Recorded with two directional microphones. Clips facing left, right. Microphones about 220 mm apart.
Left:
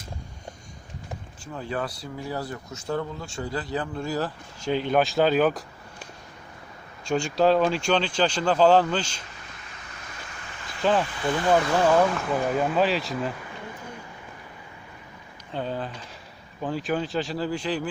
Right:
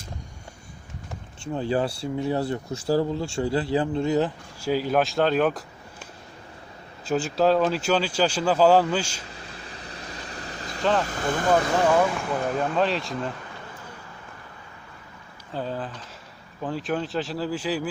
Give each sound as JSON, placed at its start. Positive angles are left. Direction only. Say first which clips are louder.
{"t": 1.5, "sound": "speech", "louder": "right 6 dB", "side_deg": -30}
{"t": 4.6, "sound": "speech", "louder": "even", "side_deg": -5}
{"t": 7.0, "sound": "speech", "louder": "even", "side_deg": -5}
{"t": 9.3, "sound": "vehicle", "louder": "right 5 dB", "side_deg": -30}
{"t": 11.0, "sound": "speech", "louder": "even", "side_deg": -45}
{"t": 12.2, "sound": "speech", "louder": "left 1 dB", "side_deg": 5}
{"t": 15.5, "sound": "speech", "louder": "even", "side_deg": 0}